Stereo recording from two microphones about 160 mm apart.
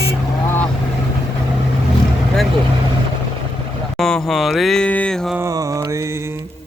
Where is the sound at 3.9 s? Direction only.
Centre (ahead or behind).